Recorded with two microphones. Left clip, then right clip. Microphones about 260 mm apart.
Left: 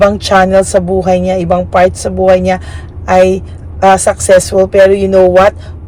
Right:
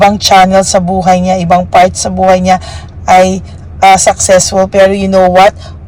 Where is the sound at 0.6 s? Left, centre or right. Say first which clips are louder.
Right 1 dB; right.